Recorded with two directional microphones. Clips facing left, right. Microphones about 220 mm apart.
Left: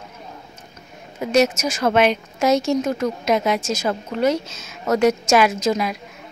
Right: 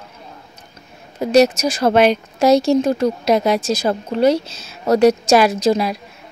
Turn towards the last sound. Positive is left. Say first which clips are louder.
# right 4 dB
turn(degrees=-35)  # may be behind; listen again after turning